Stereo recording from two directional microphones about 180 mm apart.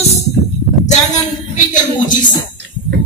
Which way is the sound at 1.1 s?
45° left (ahead or behind).